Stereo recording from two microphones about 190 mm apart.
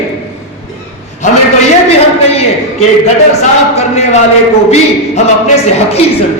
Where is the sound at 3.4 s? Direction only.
35° left (ahead or behind).